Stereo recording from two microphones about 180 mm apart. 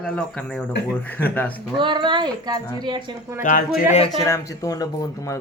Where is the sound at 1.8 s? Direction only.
25° right (ahead or behind).